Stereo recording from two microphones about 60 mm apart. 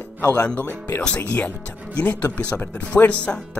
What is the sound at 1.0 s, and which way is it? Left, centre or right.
Speech, centre.